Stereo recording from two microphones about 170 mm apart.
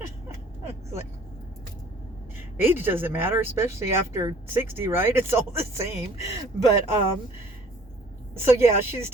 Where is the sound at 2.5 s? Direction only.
15° right (ahead or behind).